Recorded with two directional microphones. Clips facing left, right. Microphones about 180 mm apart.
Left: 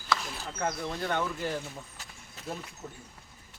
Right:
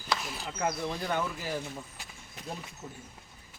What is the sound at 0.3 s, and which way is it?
Speech, 10° right (ahead or behind).